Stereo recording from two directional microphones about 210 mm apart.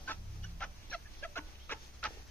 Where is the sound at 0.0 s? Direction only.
5° left (ahead or behind).